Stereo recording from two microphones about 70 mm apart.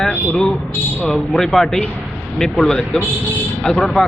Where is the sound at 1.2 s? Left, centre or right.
Centre.